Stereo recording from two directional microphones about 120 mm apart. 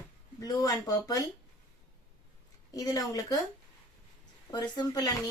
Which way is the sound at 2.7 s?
30° left (ahead or behind).